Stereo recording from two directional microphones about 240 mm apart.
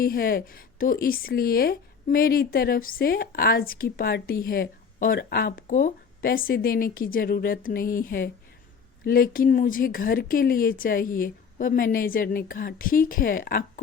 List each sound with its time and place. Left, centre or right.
0.0 s speech: left
9.0 s speech: left